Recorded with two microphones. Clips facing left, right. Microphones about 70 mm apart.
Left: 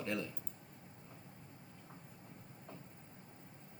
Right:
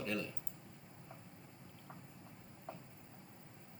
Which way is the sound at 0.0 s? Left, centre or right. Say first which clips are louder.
Left 1 dB; left.